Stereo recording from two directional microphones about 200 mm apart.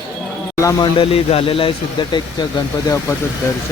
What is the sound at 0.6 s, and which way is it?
Speech, 15° left (ahead or behind).